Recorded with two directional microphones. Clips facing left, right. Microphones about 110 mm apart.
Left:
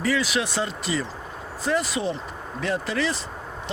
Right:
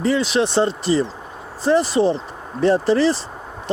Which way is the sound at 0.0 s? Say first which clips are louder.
Right 6 dB; 30° right (ahead or behind).